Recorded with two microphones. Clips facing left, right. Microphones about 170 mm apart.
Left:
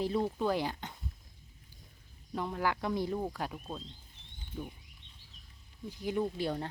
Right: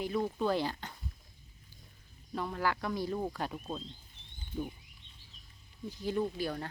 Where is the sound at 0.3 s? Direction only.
15° left (ahead or behind).